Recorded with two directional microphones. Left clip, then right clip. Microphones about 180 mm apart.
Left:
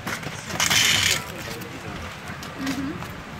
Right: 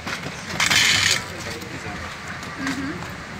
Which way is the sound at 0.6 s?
90° left.